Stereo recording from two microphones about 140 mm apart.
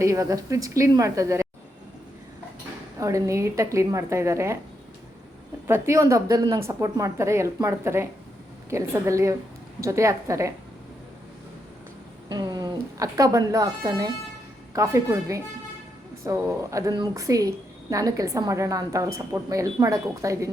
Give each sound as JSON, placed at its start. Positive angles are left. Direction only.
{"t": 0.0, "sound": "a woman's voice", "side_deg": -25}
{"t": 3.0, "sound": "a woman's voice", "side_deg": -20}
{"t": 5.6, "sound": "a woman's voice", "side_deg": -20}
{"t": 12.3, "sound": "a woman's voice", "side_deg": -30}